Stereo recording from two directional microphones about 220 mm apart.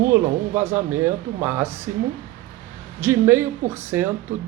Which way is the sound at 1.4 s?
10° right (ahead or behind).